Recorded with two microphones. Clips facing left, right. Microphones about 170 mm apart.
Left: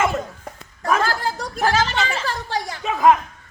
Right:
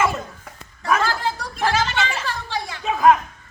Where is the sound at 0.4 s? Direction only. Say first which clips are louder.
Left 1 dB; 40° left (ahead or behind).